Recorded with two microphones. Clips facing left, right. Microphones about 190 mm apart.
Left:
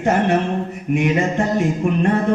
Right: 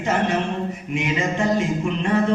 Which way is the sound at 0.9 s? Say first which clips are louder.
Left 5 dB; 55° left (ahead or behind).